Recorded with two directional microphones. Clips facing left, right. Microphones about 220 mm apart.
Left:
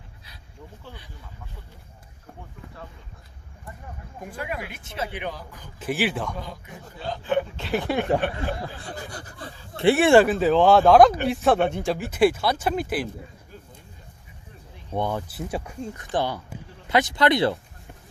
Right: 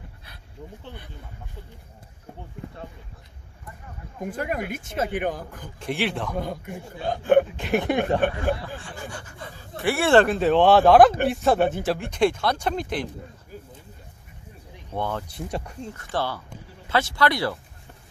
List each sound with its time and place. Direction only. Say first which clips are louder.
4.2 s speech: right 5 dB; 45° right (ahead or behind)
5.8 s speech: left 1 dB; 5° left (ahead or behind)
6.3 s speech: right 7 dB; 55° right (ahead or behind)
7.5 s speech: right 2 dB; 20° right (ahead or behind)
8.5 s speech: left 2 dB; 40° left (ahead or behind); by 10.2 s 15° left (ahead or behind)
10.2 s speech: even; centre (ahead or behind)
14.9 s speech: left 2 dB; 15° left (ahead or behind)
15.3 s speech: left 1 dB; 5° left (ahead or behind)
16.0 s speech: left 2 dB; 15° left (ahead or behind)